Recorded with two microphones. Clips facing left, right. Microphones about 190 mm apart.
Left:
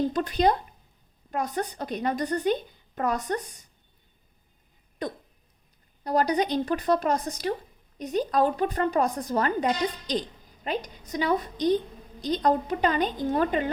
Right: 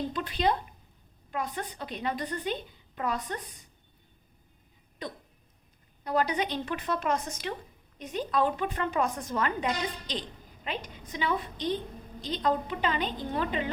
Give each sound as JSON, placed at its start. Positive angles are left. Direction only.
{"t": 0.1, "sound": "a woman's voice", "side_deg": 45}
{"t": 5.0, "sound": "a woman's voice", "side_deg": 45}